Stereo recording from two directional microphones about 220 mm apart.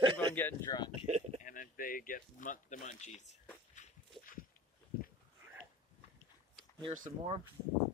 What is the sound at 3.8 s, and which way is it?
Walk, 35° left (ahead or behind).